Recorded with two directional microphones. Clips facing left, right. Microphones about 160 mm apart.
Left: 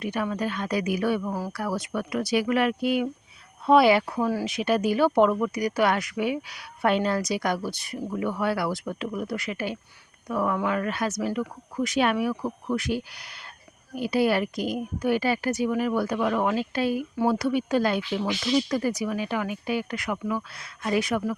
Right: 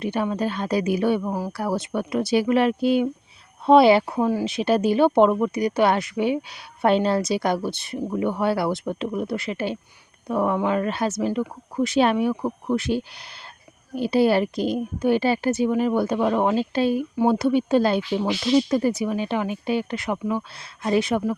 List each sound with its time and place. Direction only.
0.0 s speech: 25° right (ahead or behind)